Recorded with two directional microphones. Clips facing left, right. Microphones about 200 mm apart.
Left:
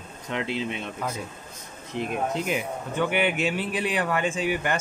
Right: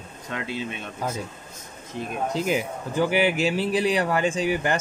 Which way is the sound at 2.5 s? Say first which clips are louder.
Right 3 dB; 35° right (ahead or behind).